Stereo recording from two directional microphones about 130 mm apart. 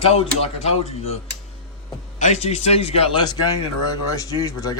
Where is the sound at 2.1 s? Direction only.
65° left (ahead or behind).